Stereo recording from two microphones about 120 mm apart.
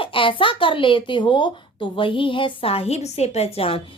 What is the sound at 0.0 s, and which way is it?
Speech, 45° left (ahead or behind).